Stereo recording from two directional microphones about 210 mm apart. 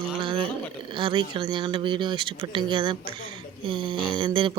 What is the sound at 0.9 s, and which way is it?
Speech, 25° right (ahead or behind).